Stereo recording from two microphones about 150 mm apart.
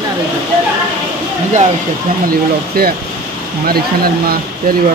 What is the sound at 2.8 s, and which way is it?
Speech, 85° right.